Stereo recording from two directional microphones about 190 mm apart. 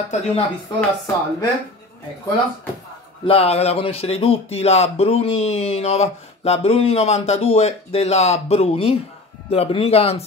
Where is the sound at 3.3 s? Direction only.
30° left (ahead or behind).